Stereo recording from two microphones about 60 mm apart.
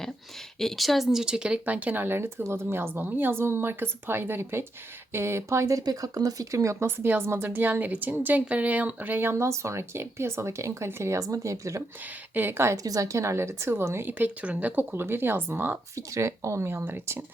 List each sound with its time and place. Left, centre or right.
0.6 s speech: centre
1.6 s a woman's voice: right
6.8 s a woman's voice: right
9.5 s speech: right
11.2 s speech: right
12.0 s a woman's voice: right
12.7 s speech: right
14.1 s speech: right
14.9 s a woman's voice: right
16.0 s speech: right